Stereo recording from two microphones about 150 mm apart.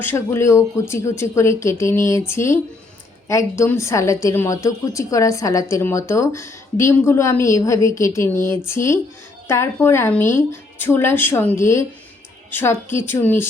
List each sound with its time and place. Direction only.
0.0 s a woman's voice: 15° left (ahead or behind)